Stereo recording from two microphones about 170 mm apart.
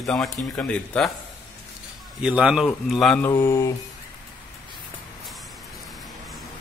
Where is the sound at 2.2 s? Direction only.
5° right (ahead or behind); by 3.7 s 20° left (ahead or behind).